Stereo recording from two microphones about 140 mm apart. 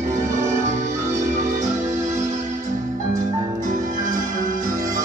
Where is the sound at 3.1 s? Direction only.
70° right (ahead or behind).